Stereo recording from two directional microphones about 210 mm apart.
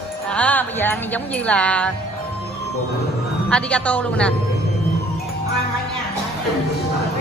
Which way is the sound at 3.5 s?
5° left (ahead or behind).